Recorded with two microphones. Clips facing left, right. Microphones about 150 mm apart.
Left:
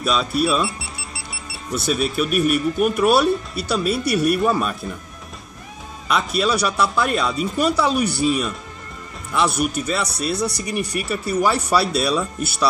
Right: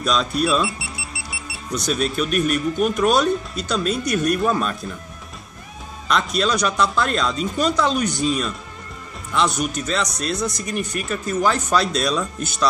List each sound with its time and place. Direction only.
0.0 s speech: 5° left (ahead or behind)
1.7 s speech: 5° left (ahead or behind)
6.0 s speech: 5° left (ahead or behind)